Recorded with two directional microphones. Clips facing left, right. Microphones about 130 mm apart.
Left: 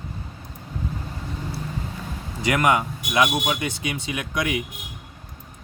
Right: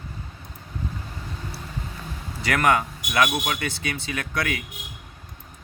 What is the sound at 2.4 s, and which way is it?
Speech, 15° left (ahead or behind).